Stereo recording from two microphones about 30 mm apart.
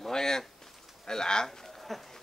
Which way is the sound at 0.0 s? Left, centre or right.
Centre.